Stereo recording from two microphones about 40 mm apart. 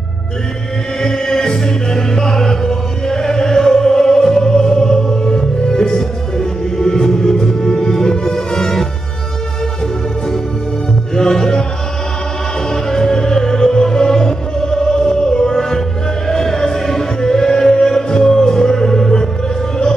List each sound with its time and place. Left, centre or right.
1.0 s music: centre
11.1 s music: centre
12.9 s music: centre